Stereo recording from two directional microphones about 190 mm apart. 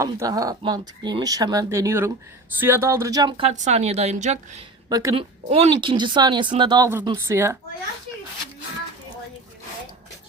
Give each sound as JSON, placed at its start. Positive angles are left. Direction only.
{"t": 0.0, "sound": "speech", "side_deg": -15}
{"t": 3.5, "sound": "a woman's voice", "side_deg": -40}
{"t": 4.9, "sound": "speech", "side_deg": -20}
{"t": 5.5, "sound": "speech", "side_deg": -30}